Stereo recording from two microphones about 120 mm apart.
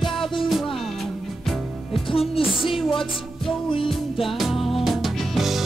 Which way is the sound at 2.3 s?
50° left (ahead or behind).